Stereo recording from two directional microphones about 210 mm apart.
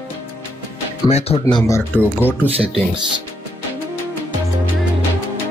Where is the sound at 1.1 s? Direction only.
30° left (ahead or behind).